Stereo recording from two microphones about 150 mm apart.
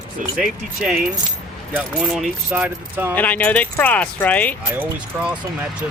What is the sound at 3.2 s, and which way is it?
Speech, 10° left (ahead or behind).